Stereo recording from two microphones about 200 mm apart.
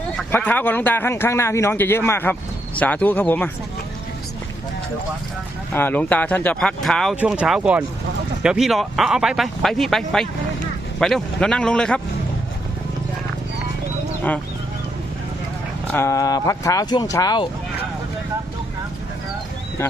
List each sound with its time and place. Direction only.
0.2 s a man's voice: 10° left (ahead or behind)
5.7 s speech: 10° left (ahead or behind)
14.3 s a man's voice: 5° left (ahead or behind)
15.9 s a man's voice: 15° left (ahead or behind)
19.8 s speech: 15° left (ahead or behind)